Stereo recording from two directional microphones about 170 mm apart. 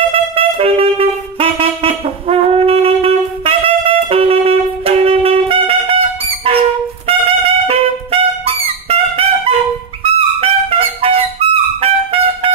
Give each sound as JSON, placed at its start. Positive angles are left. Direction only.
{"t": 0.4, "sound": "wind instrument", "side_deg": -35}
{"t": 7.1, "sound": "brass instrument", "side_deg": -35}
{"t": 10.0, "sound": "music", "side_deg": -35}